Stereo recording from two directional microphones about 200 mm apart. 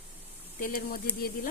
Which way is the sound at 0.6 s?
45° left (ahead or behind).